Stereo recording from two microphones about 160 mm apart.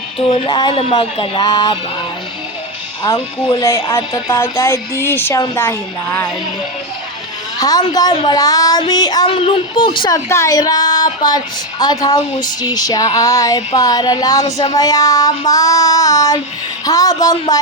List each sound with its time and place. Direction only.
0.4 s a woman's voice: 30° left (ahead or behind)
3.2 s a woman's voice: 30° left (ahead or behind)
3.6 s a woman's voice: 20° left (ahead or behind)
7.6 s a woman's voice: 25° left (ahead or behind)
10.2 s a woman's voice: 20° left (ahead or behind)